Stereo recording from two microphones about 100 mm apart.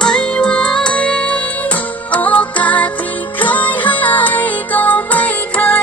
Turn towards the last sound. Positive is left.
turn(degrees=15)  # may be behind; listen again after turning